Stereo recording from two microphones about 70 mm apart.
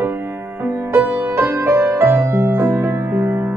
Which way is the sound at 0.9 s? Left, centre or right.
Right.